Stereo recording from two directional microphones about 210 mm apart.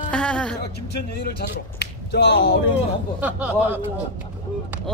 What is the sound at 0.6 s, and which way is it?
Speech, 50° left (ahead or behind).